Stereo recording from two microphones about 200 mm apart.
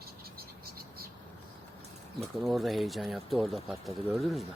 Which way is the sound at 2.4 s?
Centre (ahead or behind).